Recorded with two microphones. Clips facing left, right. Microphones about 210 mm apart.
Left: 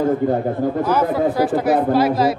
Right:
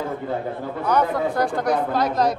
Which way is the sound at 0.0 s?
45° left (ahead or behind).